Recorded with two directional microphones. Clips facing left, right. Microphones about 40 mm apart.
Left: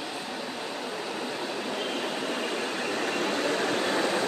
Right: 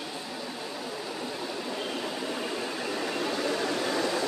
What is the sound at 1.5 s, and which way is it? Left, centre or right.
Train, left.